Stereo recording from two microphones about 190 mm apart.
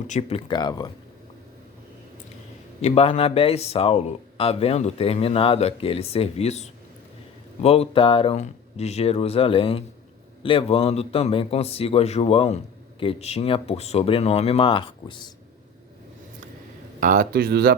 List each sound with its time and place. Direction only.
0.1 s speech: 30° left (ahead or behind)
2.8 s speech: 30° left (ahead or behind)
17.0 s speech: 45° right (ahead or behind)